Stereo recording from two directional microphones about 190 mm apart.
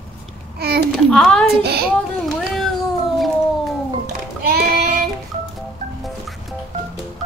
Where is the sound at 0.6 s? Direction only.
60° right (ahead or behind).